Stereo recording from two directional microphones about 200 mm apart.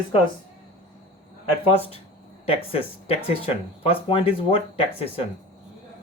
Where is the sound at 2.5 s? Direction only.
30° left (ahead or behind).